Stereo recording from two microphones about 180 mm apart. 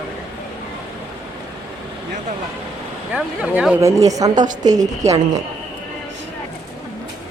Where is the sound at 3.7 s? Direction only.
15° right (ahead or behind).